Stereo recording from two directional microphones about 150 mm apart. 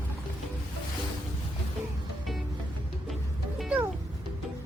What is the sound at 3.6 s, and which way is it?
Music, 5° right (ahead or behind).